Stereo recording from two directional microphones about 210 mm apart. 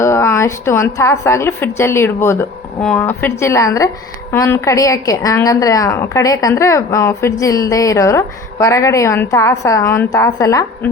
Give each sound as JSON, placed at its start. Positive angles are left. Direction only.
{"t": 0.0, "sound": "a woman's voice", "side_deg": 15}